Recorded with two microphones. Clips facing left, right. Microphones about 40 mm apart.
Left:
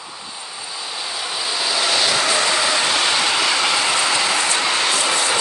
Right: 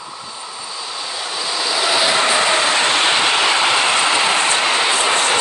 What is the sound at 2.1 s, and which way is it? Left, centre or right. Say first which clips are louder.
Train: right 3 dB; right.